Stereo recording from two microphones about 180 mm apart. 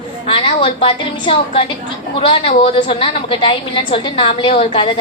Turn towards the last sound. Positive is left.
turn(degrees=30)  # may be behind; listen again after turning